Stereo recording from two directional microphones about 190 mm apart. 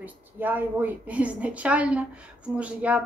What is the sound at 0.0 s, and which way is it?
A woman's voice, 10° right (ahead or behind).